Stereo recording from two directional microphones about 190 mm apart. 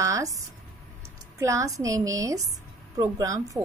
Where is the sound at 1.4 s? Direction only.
15° right (ahead or behind).